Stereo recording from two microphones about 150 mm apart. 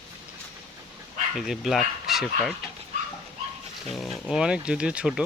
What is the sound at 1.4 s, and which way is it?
Speech, centre (ahead or behind).